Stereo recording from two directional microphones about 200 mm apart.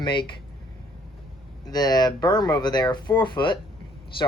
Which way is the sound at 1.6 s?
20° left (ahead or behind).